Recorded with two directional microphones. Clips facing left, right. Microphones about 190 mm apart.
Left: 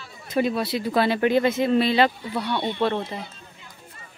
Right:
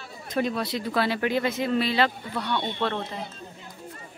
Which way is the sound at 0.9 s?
20° left (ahead or behind).